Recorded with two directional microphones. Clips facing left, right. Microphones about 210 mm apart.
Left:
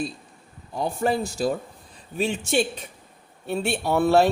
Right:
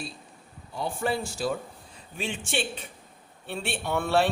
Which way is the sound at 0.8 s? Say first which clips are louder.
Left 5 dB; 40° left (ahead or behind).